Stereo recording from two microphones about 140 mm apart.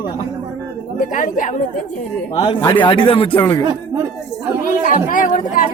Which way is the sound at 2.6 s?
35° left (ahead or behind).